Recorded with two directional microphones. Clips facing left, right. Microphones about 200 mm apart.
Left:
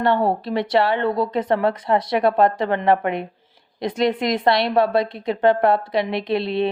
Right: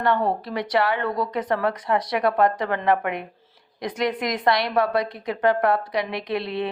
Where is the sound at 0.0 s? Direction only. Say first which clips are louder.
Left 3 dB; 30° left (ahead or behind).